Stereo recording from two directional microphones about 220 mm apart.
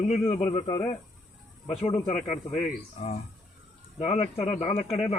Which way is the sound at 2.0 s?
35° left (ahead or behind).